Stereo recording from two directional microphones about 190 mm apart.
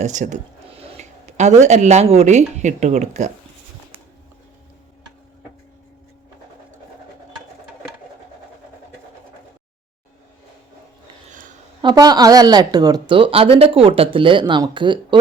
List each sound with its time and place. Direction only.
0.0 s speech: 40° right (ahead or behind)
11.3 s a sound: 40° right (ahead or behind)
11.8 s speech: 20° right (ahead or behind)